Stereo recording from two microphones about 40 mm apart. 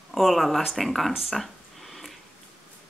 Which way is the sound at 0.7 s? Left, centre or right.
Centre.